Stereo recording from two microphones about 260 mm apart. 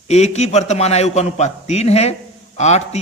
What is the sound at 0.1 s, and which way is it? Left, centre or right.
Speech, left.